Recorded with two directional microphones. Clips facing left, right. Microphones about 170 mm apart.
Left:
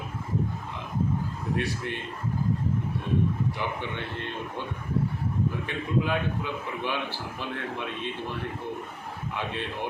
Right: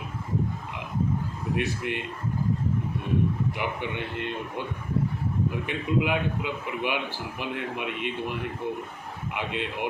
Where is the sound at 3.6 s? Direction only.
15° right (ahead or behind).